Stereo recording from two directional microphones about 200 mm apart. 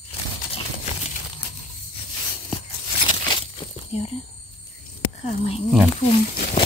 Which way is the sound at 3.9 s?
30° left (ahead or behind).